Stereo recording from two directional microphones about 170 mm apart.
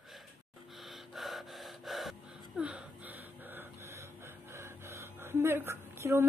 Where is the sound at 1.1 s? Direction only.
Centre (ahead or behind).